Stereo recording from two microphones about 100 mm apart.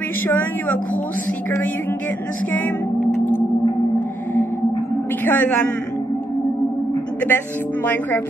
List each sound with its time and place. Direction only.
0.3 s a woman's voice: 20° left (ahead or behind)
5.2 s speech: 20° left (ahead or behind)
7.2 s speech: 20° left (ahead or behind)